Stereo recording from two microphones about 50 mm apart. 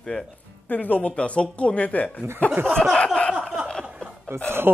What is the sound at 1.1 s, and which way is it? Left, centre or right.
Speech, left.